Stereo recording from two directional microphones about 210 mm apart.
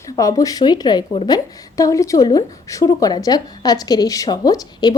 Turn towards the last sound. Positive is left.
turn(degrees=20)  # may be behind; listen again after turning